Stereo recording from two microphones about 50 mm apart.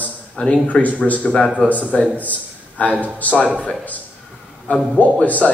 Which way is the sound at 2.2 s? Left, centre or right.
Left.